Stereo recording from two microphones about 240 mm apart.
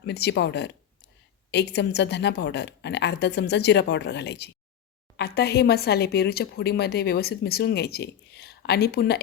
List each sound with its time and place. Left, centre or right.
0.0 s a woman's voice: left